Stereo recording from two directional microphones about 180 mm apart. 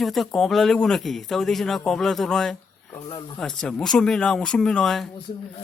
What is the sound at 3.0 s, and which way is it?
Speech, 30° left (ahead or behind).